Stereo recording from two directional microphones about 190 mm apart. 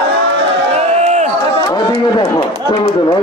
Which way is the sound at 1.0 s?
35° right (ahead or behind).